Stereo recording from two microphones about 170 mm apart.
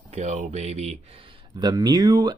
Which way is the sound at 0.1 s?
45° right (ahead or behind).